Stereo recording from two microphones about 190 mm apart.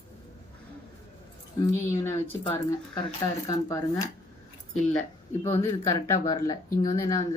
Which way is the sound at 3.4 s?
15° left (ahead or behind).